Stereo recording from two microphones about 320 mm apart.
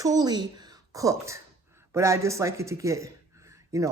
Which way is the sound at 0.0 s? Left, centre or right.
Centre.